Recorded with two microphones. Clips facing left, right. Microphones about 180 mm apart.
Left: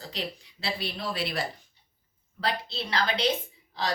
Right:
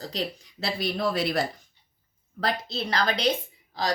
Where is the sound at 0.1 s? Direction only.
40° right (ahead or behind).